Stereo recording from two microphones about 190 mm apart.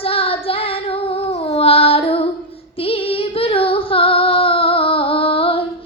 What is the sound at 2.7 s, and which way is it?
Female singing, 30° left (ahead or behind).